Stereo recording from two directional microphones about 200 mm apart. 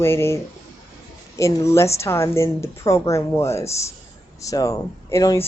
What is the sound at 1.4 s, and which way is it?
A woman's voice, 15° left (ahead or behind).